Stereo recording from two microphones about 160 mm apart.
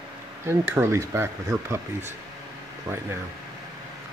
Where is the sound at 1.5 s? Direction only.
5° left (ahead or behind).